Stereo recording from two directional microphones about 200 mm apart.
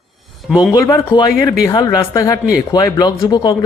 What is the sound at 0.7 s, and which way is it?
Speech, 15° left (ahead or behind).